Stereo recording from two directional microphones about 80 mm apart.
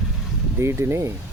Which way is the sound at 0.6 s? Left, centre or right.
Right.